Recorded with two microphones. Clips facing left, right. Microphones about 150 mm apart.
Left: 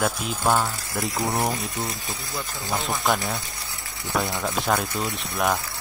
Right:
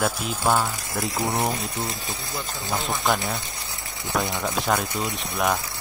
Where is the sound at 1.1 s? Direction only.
20° right (ahead or behind).